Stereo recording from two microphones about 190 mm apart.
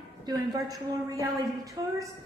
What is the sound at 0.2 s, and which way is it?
A woman's voice, 20° right (ahead or behind).